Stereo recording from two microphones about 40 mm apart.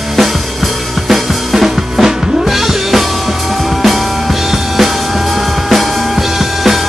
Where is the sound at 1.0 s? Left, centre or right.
Centre.